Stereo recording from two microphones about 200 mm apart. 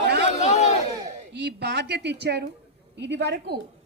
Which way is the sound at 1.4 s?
55° right (ahead or behind).